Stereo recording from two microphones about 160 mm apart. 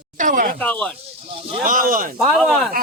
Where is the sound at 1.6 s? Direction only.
60° right (ahead or behind).